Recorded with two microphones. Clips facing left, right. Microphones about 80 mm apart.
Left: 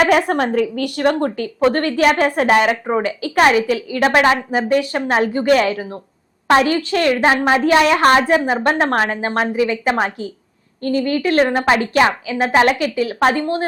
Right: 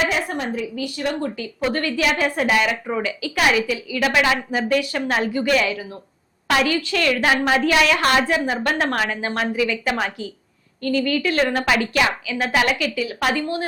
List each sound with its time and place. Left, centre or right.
0.0 s a woman's voice: left